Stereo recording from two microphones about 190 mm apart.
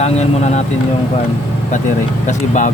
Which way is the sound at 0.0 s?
35° left (ahead or behind).